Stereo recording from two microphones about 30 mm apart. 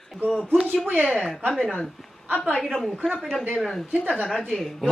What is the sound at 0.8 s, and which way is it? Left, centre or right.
Speech, right.